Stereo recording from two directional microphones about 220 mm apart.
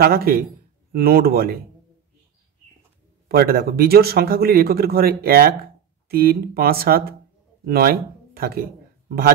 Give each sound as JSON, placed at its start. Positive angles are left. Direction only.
{"t": 0.0, "sound": "speech", "side_deg": -45}
{"t": 3.3, "sound": "speech", "side_deg": -45}